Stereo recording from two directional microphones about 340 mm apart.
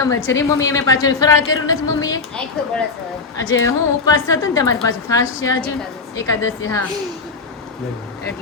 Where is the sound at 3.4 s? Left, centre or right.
Left.